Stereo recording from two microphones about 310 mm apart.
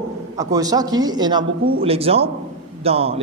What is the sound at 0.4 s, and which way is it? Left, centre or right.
Speech, centre.